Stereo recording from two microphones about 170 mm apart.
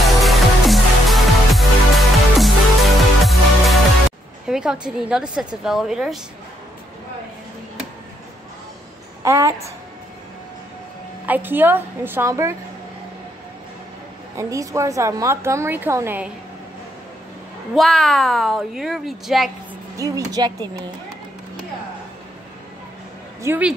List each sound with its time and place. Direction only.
0.2 s music: centre (ahead or behind)
4.5 s speech: 5° right (ahead or behind)
9.2 s speech: 15° right (ahead or behind)
11.2 s a woman's voice: 10° right (ahead or behind)
14.3 s a woman's voice: 20° right (ahead or behind)
17.7 s speech: centre (ahead or behind)
20.0 s speech: 20° right (ahead or behind)
23.4 s a woman's voice: 10° right (ahead or behind)